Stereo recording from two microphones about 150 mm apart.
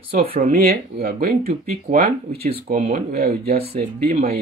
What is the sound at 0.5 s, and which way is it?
Speech, 80° right.